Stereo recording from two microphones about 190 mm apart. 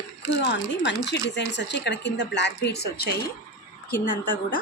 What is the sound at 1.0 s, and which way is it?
A woman's voice, 65° left (ahead or behind).